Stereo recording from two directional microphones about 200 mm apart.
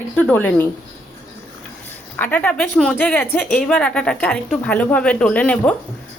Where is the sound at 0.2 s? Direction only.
10° left (ahead or behind).